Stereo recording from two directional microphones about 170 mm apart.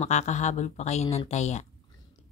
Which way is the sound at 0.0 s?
40° left (ahead or behind).